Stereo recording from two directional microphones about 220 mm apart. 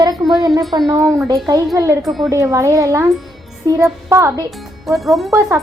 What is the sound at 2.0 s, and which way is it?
Speech, centre (ahead or behind).